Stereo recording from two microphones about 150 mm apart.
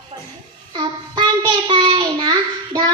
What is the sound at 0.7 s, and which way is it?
Child singing, 30° right (ahead or behind).